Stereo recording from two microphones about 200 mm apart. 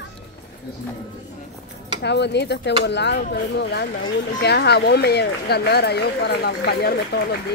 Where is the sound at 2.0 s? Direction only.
60° left (ahead or behind).